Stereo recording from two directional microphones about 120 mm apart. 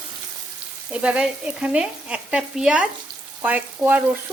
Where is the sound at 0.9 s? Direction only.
10° right (ahead or behind).